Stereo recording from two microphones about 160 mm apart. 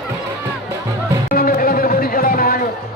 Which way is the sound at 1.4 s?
65° left (ahead or behind).